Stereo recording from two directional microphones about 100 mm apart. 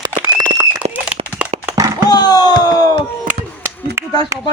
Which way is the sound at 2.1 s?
40° left (ahead or behind).